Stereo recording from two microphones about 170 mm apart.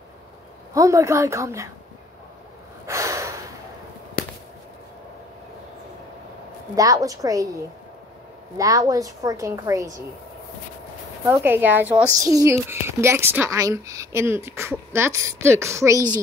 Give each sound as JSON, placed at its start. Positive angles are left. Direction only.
{"t": 0.7, "sound": "a child's voice", "side_deg": -20}
{"t": 2.9, "sound": "gasp", "side_deg": -20}
{"t": 4.2, "sound": "a sound", "side_deg": 55}
{"t": 6.7, "sound": "a woman's voice", "side_deg": -20}
{"t": 8.5, "sound": "a woman's voice", "side_deg": -20}
{"t": 11.2, "sound": "a child's voice", "side_deg": -15}